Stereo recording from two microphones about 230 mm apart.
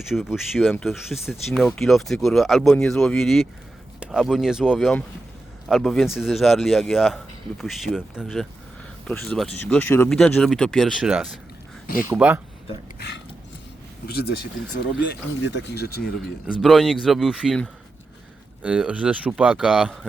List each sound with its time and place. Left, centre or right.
0.1 s speech: centre
13.0 s a sound: left
14.1 s speech: left
16.6 s speech: centre